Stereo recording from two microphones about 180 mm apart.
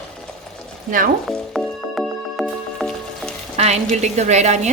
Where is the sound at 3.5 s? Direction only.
35° right (ahead or behind).